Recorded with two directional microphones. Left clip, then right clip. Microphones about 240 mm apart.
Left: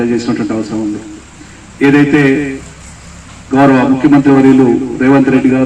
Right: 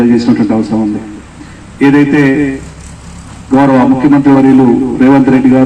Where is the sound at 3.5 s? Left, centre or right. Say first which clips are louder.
Right 1 dB; right.